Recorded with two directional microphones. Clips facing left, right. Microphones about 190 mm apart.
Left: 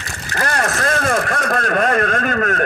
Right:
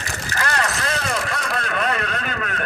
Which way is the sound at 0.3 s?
45° left (ahead or behind).